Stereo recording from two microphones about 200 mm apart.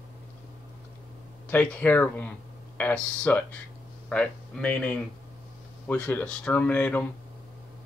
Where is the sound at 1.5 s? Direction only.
5° left (ahead or behind).